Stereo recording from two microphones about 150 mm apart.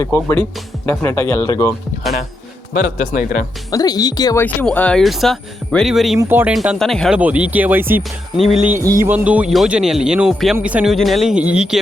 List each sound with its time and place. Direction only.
0.0 s speech: 15° left (ahead or behind)
2.7 s a man's voice: 60° left (ahead or behind)
3.7 s speech: 25° left (ahead or behind)
4.4 s speech: 10° left (ahead or behind)
6.1 s speech: 15° right (ahead or behind)
6.5 s speech: centre (ahead or behind)
7.2 s speech: 10° right (ahead or behind)